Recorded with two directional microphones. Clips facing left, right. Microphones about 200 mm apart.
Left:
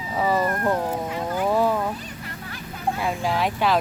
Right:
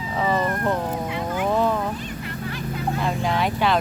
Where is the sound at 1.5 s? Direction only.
10° left (ahead or behind).